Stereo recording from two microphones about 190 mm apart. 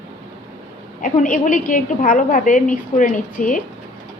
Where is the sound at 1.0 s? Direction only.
45° left (ahead or behind).